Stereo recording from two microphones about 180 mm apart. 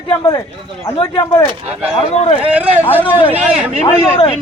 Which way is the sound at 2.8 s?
10° left (ahead or behind).